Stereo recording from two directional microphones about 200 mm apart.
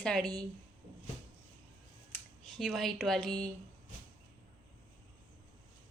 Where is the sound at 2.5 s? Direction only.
Centre (ahead or behind).